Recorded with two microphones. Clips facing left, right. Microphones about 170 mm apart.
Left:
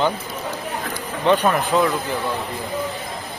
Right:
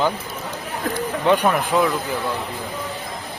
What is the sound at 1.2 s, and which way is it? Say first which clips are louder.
Speech: left 1 dB; 10° right (ahead or behind).